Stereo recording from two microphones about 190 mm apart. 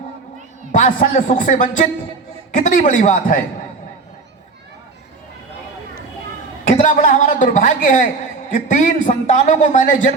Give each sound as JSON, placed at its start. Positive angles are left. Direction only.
{"t": 0.7, "sound": "a man's voice", "side_deg": 40}
{"t": 6.7, "sound": "a man's voice", "side_deg": 40}